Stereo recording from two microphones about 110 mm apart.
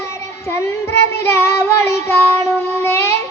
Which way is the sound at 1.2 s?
25° left (ahead or behind).